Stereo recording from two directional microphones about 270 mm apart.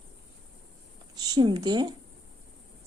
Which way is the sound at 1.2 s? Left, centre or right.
Centre.